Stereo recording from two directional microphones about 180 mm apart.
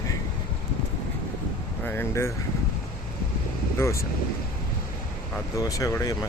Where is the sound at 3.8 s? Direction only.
15° left (ahead or behind).